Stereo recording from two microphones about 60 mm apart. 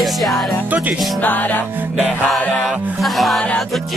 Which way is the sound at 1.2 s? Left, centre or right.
Left.